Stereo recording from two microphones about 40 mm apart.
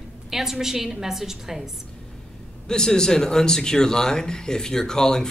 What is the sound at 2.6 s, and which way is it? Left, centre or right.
Speech, centre.